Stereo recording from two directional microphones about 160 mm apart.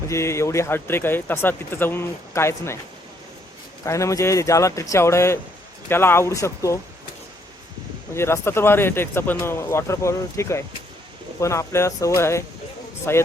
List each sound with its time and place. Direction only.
0.1 s speech: 15° left (ahead or behind)
3.8 s a man's voice: 20° left (ahead or behind)
8.1 s speech: 15° left (ahead or behind)